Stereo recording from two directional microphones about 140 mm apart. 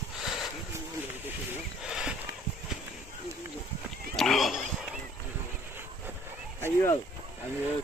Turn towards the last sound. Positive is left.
turn(degrees=15)  # may be behind; listen again after turning